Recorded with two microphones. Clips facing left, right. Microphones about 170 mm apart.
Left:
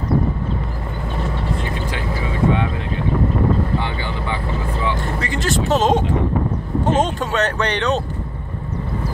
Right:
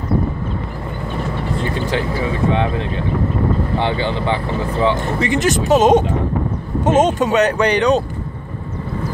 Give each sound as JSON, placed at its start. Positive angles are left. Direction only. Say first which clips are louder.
{"t": 3.8, "sound": "speech", "louder": "right 7 dB", "side_deg": -25}